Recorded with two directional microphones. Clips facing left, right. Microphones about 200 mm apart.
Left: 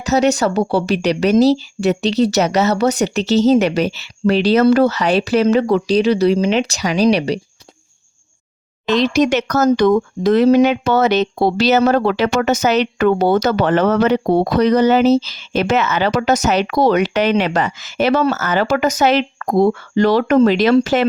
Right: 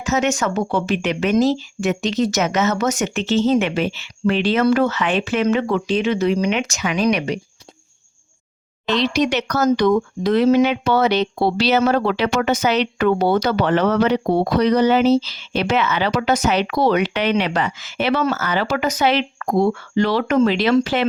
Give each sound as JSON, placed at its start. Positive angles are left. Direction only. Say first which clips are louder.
{"t": 0.0, "sound": "speech", "louder": "left 5 dB", "side_deg": 35}
{"t": 8.9, "sound": "speech", "louder": "left 4 dB", "side_deg": 45}